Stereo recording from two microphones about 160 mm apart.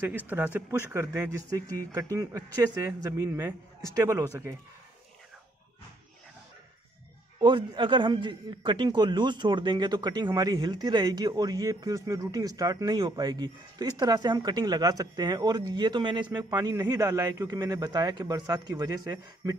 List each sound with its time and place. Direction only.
0.0 s speech: 10° right (ahead or behind)
7.3 s a man's voice: 30° right (ahead or behind)